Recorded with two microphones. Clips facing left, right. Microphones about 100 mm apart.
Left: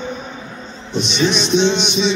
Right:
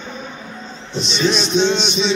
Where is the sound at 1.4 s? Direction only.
5° right (ahead or behind).